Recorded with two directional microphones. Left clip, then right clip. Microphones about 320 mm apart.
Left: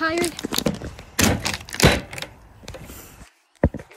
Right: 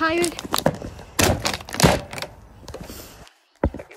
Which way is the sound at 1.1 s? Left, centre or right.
Right.